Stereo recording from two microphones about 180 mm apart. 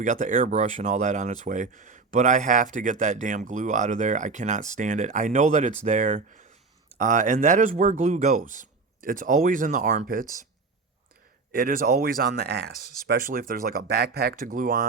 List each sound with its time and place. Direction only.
0.0 s speech: 45° right (ahead or behind)
11.5 s speech: 50° right (ahead or behind)